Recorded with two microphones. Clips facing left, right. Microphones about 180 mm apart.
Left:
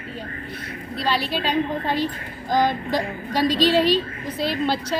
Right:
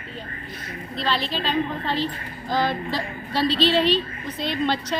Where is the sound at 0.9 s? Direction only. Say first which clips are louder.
Left 2 dB; 10° left (ahead or behind).